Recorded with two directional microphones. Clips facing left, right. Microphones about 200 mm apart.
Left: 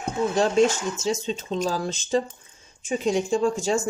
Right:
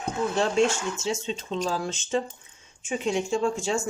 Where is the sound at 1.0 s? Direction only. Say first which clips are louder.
Left 5 dB; 40° left (ahead or behind).